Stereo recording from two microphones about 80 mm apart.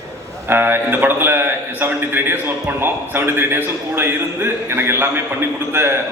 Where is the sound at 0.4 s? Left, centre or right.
Right.